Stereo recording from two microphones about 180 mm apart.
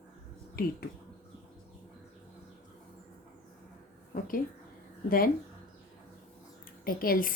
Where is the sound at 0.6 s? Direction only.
55° left (ahead or behind).